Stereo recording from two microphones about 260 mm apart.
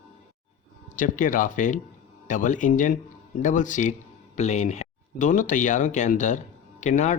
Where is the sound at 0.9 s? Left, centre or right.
Left.